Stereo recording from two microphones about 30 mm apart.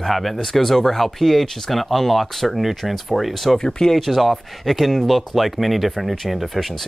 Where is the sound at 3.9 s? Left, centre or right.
Centre.